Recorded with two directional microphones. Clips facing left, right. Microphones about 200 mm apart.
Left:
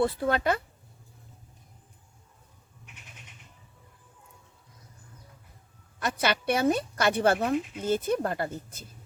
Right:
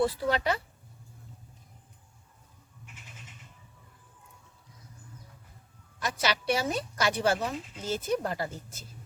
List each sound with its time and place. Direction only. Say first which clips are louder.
0.0 s speech: left 2 dB; 55° left (ahead or behind)
6.0 s speech: left 3 dB; 55° left (ahead or behind)